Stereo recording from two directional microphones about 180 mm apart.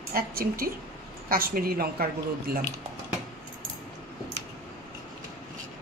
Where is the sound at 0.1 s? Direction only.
55° right (ahead or behind).